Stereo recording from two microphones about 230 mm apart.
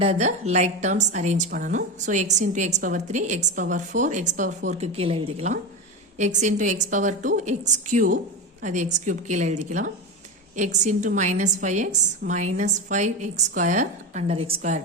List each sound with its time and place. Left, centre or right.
0.0 s a woman's voice: right